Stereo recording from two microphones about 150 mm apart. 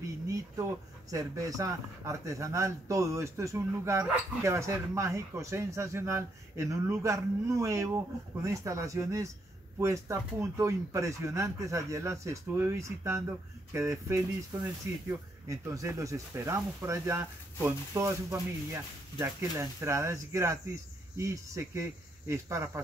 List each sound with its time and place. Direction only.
0.3 s speech: 20° right (ahead or behind)